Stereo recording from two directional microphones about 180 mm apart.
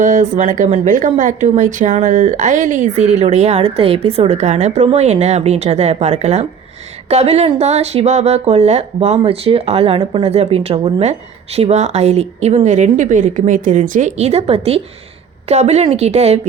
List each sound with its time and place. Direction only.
0.0 s speech: 45° right (ahead or behind)